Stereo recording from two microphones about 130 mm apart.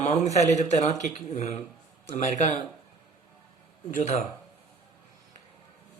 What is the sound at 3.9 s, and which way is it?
Speech, 65° left (ahead or behind).